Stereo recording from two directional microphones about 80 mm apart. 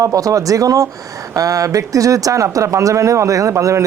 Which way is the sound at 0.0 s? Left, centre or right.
Right.